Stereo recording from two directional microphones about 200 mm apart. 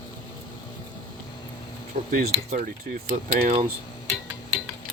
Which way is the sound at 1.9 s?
35° right (ahead or behind).